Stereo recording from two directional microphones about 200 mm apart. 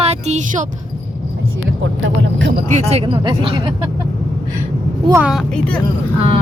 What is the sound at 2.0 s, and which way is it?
Speech, 65° right (ahead or behind).